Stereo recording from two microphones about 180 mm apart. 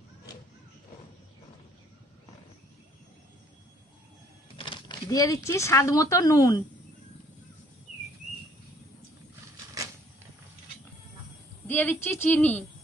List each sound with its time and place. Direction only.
4.6 s speech: 25° left (ahead or behind)
11.6 s a woman's voice: 10° left (ahead or behind)